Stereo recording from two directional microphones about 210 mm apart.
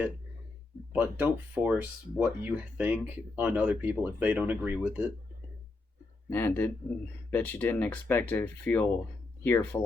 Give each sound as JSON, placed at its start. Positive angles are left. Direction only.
{"t": 0.9, "sound": "speech", "side_deg": -5}
{"t": 6.3, "sound": "speech", "side_deg": 10}